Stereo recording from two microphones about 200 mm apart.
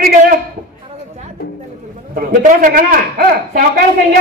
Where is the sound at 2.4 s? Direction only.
40° right (ahead or behind).